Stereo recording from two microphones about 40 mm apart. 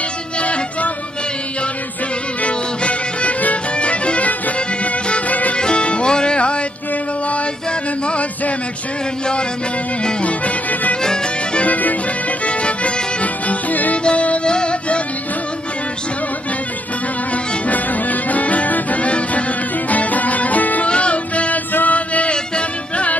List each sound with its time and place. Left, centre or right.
0.4 s music: left
2.4 s music: left
5.3 s music: left
5.6 s music: left
8.1 s a sound: left
10.2 s music: left
11.0 s music: centre
11.6 s music: left
12.4 s violin: left
14.0 s music: left
17.6 s music: left
20.8 s music: left
21.7 s chant: left
22.3 s music: left